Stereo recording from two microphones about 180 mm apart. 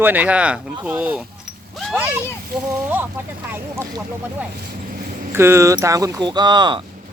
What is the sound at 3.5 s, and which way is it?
Speech, 10° right (ahead or behind).